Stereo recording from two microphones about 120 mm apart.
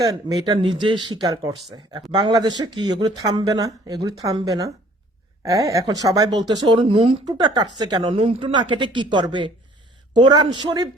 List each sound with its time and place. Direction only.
0.0 s speech: 30° right (ahead or behind)
6.5 s speech: 40° right (ahead or behind)
7.3 s speech: 35° right (ahead or behind)
8.1 s speech: 50° right (ahead or behind)
8.5 s speech: 40° right (ahead or behind)